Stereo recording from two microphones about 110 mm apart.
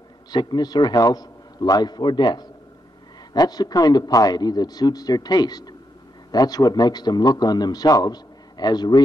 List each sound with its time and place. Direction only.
0.3 s a man's voice: 40° left (ahead or behind)